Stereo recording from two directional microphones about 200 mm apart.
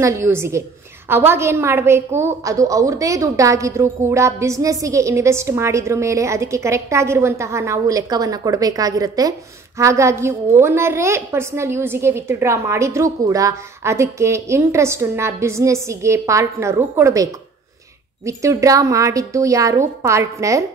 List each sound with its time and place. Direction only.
0.0 s a woman's voice: 15° right (ahead or behind)